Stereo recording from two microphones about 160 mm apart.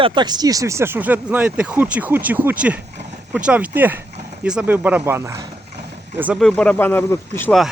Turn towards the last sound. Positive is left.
turn(degrees=15)  # may be behind; listen again after turning